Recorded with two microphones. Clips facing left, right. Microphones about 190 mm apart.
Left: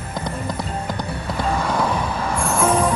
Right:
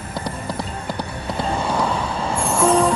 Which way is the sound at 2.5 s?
5° left (ahead or behind).